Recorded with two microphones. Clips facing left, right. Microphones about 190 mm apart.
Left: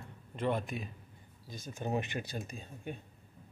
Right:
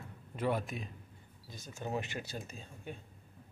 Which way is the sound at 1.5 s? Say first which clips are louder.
Left 3 dB; 15° left (ahead or behind).